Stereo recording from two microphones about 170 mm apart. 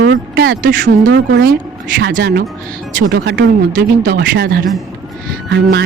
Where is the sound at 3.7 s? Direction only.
55° right (ahead or behind).